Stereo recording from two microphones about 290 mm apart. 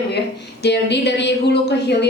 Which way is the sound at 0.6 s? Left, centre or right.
Left.